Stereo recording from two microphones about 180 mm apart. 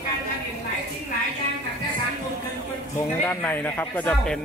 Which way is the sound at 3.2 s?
10° left (ahead or behind).